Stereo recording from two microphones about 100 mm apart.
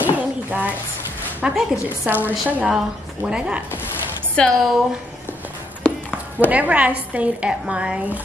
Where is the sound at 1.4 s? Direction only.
5° right (ahead or behind).